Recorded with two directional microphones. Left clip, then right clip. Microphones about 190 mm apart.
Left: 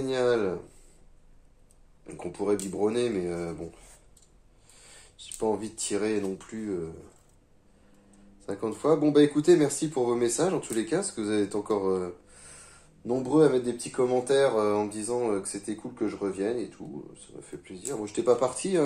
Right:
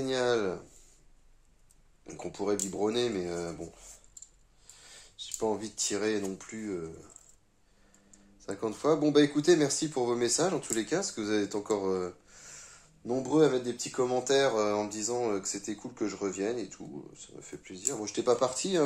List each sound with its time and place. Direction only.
0.0 s speech: 45° right (ahead or behind)
2.0 s speech: 45° right (ahead or behind)
5.1 s speech: 40° right (ahead or behind)
8.5 s speech: 45° right (ahead or behind)